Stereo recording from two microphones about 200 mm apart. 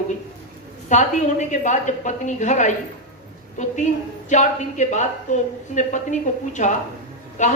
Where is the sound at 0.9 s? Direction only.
35° left (ahead or behind).